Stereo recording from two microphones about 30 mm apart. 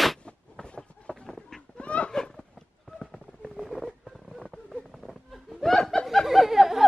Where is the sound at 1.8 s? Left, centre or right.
Left.